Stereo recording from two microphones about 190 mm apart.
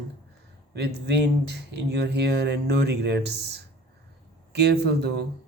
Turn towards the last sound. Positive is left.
turn(degrees=-60)  # may be behind; listen again after turning